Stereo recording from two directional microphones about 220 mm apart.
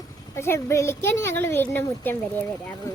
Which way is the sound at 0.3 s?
10° left (ahead or behind).